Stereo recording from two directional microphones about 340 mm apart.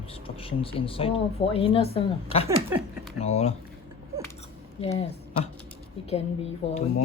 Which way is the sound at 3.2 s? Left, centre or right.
Centre.